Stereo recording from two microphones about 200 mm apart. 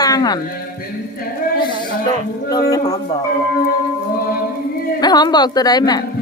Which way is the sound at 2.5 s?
20° left (ahead or behind).